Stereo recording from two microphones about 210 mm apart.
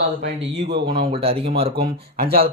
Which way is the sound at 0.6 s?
55° right (ahead or behind).